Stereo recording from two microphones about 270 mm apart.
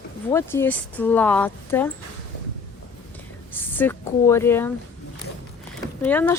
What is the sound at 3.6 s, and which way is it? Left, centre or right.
Speech, centre.